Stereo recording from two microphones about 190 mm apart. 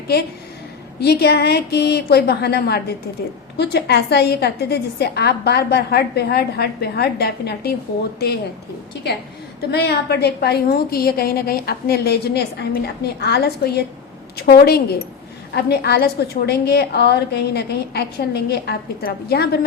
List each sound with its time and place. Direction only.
0.9 s a woman's voice: 60° left (ahead or behind)
9.7 s a woman's voice: 60° left (ahead or behind)